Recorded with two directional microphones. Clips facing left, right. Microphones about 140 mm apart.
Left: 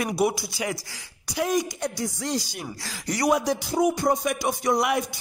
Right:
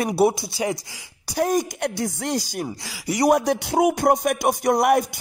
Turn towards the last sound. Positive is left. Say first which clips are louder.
# right 5 dB
turn(degrees=-50)  # may be behind; listen again after turning